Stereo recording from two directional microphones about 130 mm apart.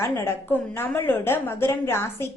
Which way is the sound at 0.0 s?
20° left (ahead or behind).